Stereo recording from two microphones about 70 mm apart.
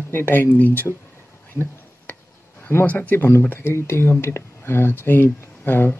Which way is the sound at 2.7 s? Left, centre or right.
Left.